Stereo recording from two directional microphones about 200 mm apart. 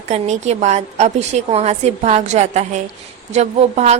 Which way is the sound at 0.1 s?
35° right (ahead or behind).